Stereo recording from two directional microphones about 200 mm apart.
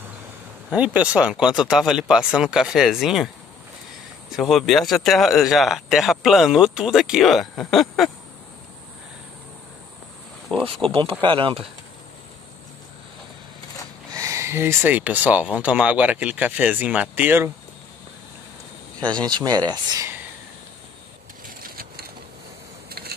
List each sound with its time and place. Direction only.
0.7 s speech: 5° right (ahead or behind)
4.4 s speech: centre (ahead or behind)
10.5 s speech: 5° left (ahead or behind)
10.9 s speech: 25° right (ahead or behind)
14.1 s speech: 15° right (ahead or behind)
19.2 s speech: 20° right (ahead or behind)
21.5 s a sound: 45° right (ahead or behind)